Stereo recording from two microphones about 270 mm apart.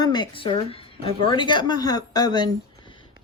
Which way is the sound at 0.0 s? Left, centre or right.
Centre.